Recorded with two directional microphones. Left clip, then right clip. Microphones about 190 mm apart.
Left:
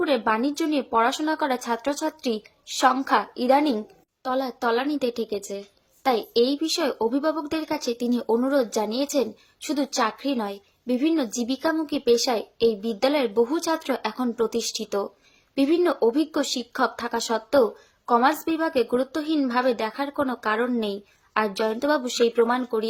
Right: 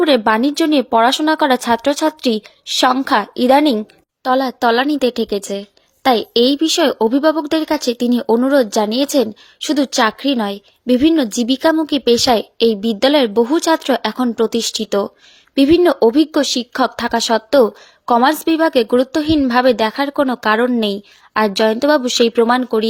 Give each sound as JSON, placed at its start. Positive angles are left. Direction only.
{"t": 0.0, "sound": "speech", "side_deg": -45}